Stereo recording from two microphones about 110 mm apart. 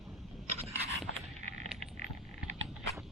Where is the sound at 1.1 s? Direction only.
80° right.